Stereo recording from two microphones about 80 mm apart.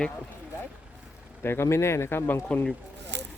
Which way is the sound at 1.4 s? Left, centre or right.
Left.